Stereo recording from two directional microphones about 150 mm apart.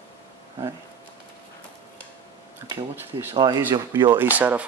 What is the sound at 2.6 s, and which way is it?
Speech, 15° right (ahead or behind).